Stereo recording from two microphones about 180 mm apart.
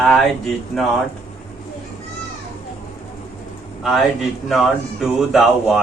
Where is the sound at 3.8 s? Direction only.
Centre (ahead or behind).